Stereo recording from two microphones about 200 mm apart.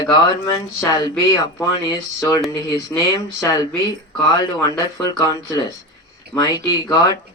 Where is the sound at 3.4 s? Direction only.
20° left (ahead or behind).